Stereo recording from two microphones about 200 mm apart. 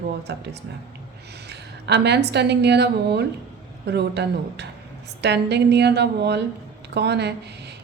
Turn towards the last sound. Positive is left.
turn(degrees=-55)  # may be behind; listen again after turning